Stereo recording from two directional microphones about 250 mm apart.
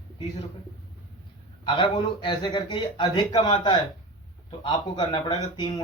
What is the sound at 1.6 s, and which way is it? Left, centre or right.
A man's voice, centre.